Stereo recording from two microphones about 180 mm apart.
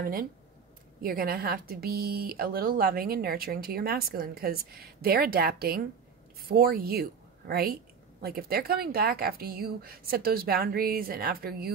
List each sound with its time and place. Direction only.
0.0 s a woman's voice: 55° right (ahead or behind)